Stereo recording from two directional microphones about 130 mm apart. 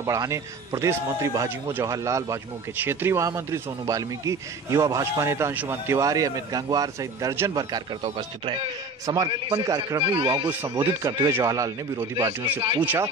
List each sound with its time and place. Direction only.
0.0 s a man's voice: 25° right (ahead or behind)
10.9 s a man's voice: 25° right (ahead or behind)
12.8 s speech: 15° right (ahead or behind)